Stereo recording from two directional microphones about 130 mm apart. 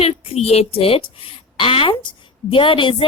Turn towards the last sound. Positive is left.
turn(degrees=40)  # may be behind; listen again after turning